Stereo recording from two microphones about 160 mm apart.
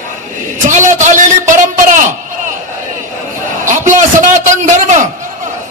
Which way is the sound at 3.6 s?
50° right (ahead or behind).